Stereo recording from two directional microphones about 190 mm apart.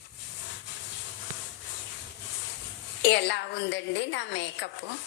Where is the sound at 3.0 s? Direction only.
65° left (ahead or behind).